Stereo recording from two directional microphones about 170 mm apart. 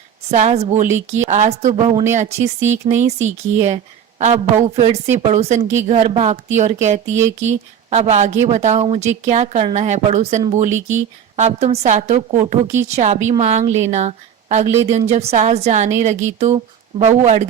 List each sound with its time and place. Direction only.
0.3 s a woman's voice: 40° right (ahead or behind)
0.9 s speech: 15° right (ahead or behind)
1.3 s a woman's voice: 40° right (ahead or behind)
2.1 s a woman's voice: 45° right (ahead or behind)